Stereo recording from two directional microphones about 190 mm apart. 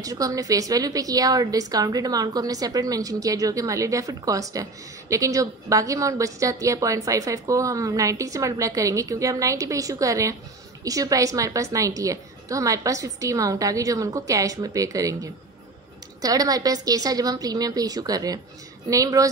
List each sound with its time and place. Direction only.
0.0 s a woman's voice: 20° right (ahead or behind)
16.2 s a woman's voice: 20° right (ahead or behind)